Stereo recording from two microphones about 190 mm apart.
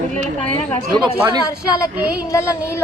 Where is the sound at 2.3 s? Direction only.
15° left (ahead or behind).